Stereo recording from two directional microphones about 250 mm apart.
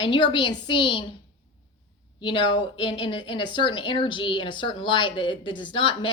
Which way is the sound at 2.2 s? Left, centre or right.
Centre.